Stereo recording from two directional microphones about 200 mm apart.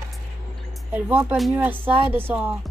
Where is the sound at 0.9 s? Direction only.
10° right (ahead or behind).